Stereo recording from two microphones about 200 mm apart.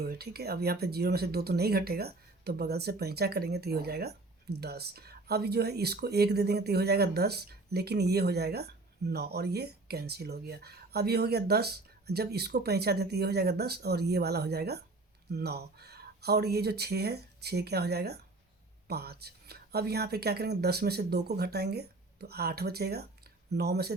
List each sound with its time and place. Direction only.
0.0 s a woman's voice: 50° right (ahead or behind)